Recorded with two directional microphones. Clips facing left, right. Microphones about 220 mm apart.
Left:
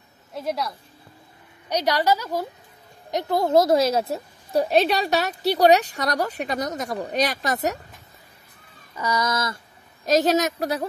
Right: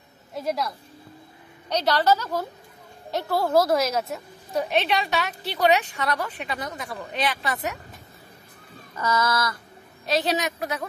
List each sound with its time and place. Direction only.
0.3 s a woman's voice: centre (ahead or behind)
1.7 s a woman's voice: 10° left (ahead or behind); by 7.8 s 40° left (ahead or behind)
8.9 s a woman's voice: 15° left (ahead or behind)
10.0 s a woman's voice: 45° left (ahead or behind)